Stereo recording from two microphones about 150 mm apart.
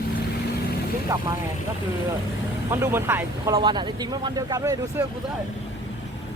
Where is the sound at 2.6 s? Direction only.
20° right (ahead or behind).